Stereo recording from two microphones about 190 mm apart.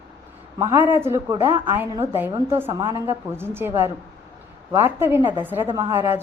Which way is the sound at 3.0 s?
10° right (ahead or behind).